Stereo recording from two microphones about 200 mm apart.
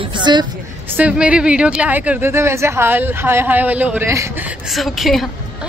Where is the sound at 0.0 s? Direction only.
20° right (ahead or behind).